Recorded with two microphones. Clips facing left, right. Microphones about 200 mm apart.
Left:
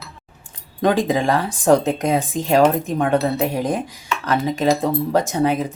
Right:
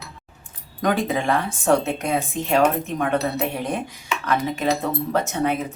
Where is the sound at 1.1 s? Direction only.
35° left (ahead or behind).